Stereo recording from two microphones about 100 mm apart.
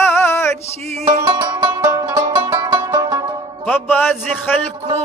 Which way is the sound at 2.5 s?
50° right (ahead or behind).